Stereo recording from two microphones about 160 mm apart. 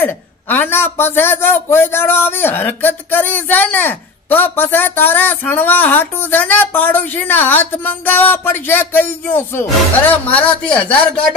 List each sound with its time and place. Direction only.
0.0 s a man's voice: 10° left (ahead or behind)